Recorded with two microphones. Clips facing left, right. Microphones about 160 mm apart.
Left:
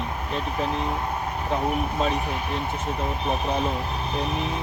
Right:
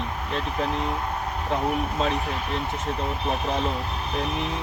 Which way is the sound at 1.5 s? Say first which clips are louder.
Even; centre (ahead or behind).